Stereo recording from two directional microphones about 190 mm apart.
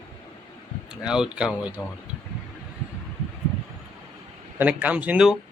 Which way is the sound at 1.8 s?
15° left (ahead or behind).